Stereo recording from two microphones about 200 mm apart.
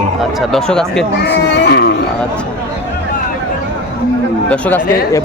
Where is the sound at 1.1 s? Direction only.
60° left (ahead or behind).